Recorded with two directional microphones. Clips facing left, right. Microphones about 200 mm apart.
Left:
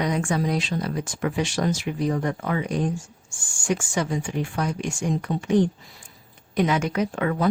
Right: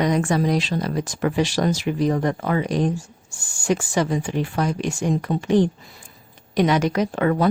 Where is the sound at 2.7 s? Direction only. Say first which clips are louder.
Right 4 dB; 90° right.